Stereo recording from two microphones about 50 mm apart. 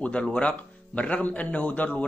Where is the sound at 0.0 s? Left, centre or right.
Left.